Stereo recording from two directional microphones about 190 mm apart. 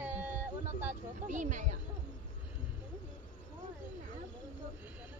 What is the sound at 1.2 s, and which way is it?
Speech, 40° right (ahead or behind).